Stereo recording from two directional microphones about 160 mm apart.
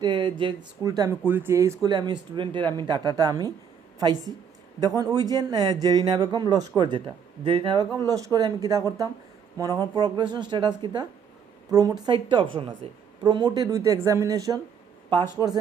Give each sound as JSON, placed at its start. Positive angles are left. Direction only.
{"t": 0.0, "sound": "a woman's voice", "side_deg": -30}
{"t": 4.8, "sound": "a woman's voice", "side_deg": -25}